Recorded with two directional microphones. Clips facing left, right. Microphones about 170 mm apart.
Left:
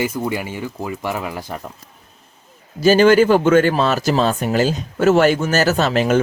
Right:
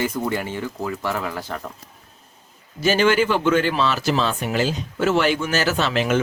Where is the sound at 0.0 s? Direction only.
10° left (ahead or behind).